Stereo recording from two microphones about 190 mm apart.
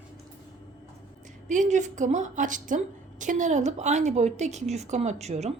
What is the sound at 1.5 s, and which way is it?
A woman's voice, 40° right (ahead or behind).